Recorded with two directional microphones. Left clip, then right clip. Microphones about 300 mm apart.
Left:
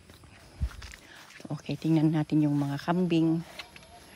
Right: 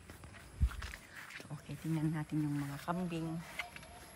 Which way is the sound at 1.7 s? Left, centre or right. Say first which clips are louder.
Left 14 dB; centre.